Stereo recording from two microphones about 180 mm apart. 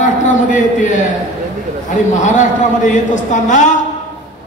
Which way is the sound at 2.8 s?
45° left (ahead or behind).